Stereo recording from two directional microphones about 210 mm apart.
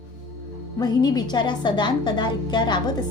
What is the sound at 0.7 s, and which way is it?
A woman's voice, 20° left (ahead or behind).